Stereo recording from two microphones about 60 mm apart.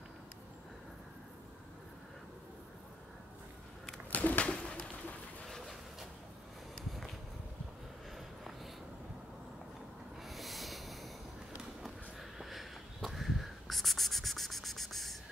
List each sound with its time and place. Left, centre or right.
4.1 s a sound: left
5.5 s vehicle: centre
10.2 s sanding: centre
11.8 s sniff: centre